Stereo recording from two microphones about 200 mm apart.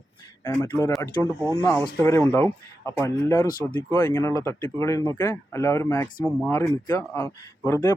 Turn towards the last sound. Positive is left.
turn(degrees=15)  # may be behind; listen again after turning